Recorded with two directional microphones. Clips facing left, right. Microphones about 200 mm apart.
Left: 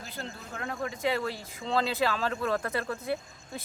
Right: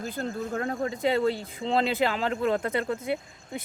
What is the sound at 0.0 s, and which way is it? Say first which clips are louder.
Speech: right 10 dB; 50° right (ahead or behind).